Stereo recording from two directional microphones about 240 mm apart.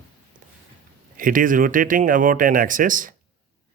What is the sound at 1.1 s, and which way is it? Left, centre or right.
Speech, right.